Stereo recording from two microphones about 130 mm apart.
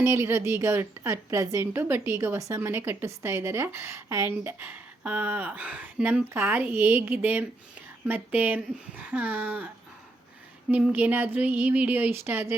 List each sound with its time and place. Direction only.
0.0 s a woman's voice: 20° right (ahead or behind)